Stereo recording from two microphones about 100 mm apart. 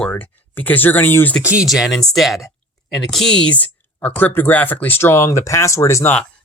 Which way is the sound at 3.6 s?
15° left (ahead or behind).